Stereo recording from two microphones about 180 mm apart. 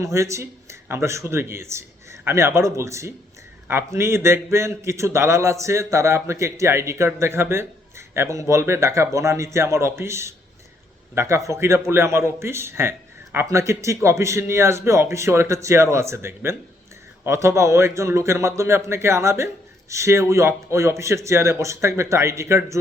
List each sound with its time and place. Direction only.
0.0 s a man's voice: 15° right (ahead or behind)